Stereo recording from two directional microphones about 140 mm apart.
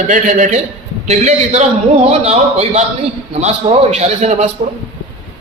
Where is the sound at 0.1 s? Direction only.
60° right (ahead or behind).